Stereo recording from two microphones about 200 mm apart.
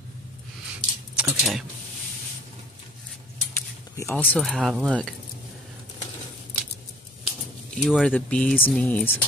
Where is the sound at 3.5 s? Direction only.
10° left (ahead or behind).